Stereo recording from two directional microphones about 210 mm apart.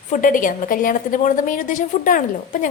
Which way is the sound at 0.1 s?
40° left (ahead or behind).